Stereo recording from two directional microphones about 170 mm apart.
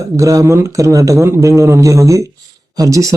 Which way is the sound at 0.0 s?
20° right (ahead or behind).